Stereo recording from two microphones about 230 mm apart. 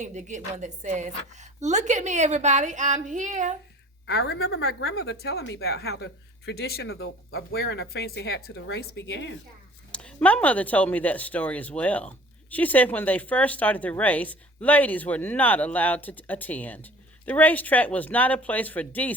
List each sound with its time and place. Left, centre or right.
0.0 s a woman's voice: right
4.0 s speech: left
6.8 s speech: left
7.9 s speech: left
9.9 s speech: centre